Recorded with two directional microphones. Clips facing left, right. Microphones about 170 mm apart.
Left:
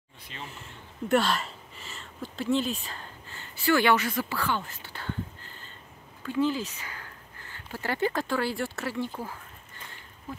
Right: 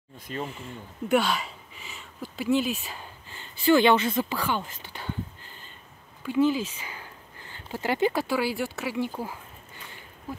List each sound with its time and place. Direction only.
0.5 s speech: centre (ahead or behind)